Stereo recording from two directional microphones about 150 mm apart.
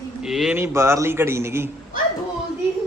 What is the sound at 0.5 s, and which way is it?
A man's voice, 15° right (ahead or behind).